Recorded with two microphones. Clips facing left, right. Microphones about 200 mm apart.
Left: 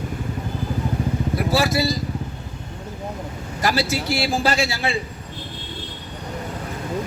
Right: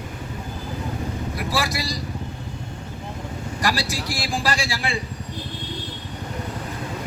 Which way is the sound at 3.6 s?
25° left (ahead or behind).